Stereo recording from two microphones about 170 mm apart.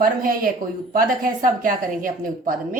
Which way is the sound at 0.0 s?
55° right (ahead or behind).